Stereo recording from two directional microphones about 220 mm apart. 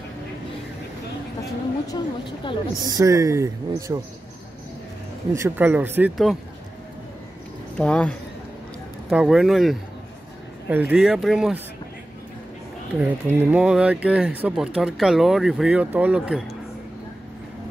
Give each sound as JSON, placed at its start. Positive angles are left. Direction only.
{"t": 1.9, "sound": "a woman's voice", "side_deg": 20}
{"t": 2.9, "sound": "speech", "side_deg": -15}
{"t": 5.3, "sound": "speech", "side_deg": -10}
{"t": 7.7, "sound": "speech", "side_deg": 5}
{"t": 13.0, "sound": "speech", "side_deg": -5}